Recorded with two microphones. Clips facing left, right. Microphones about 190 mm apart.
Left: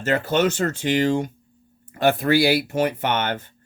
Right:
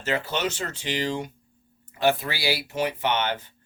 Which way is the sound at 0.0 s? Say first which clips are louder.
Left 7 dB; 50° left (ahead or behind).